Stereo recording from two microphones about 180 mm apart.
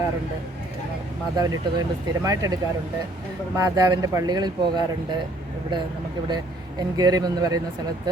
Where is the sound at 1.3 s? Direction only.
20° right (ahead or behind).